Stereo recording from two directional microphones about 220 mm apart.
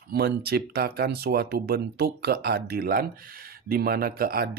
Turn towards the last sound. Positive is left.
turn(degrees=-40)  # may be behind; listen again after turning